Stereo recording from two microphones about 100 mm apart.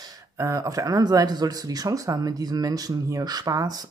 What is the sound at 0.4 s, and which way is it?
Speech, 35° right (ahead or behind).